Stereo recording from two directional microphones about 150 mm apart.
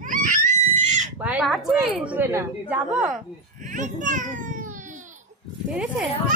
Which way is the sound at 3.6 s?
55° right (ahead or behind).